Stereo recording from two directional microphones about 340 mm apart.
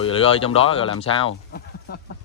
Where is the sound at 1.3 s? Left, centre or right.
Left.